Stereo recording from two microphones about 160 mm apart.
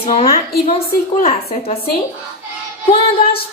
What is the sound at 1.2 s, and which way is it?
Speech, 40° left (ahead or behind).